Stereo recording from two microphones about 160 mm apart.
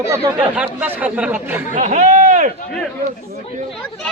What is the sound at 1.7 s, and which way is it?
Speech, 50° right (ahead or behind).